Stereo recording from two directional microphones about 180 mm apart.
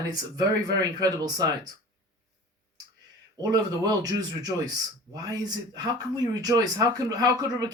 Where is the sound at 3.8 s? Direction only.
20° right (ahead or behind).